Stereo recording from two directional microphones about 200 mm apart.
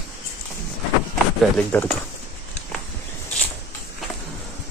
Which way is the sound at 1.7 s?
10° left (ahead or behind).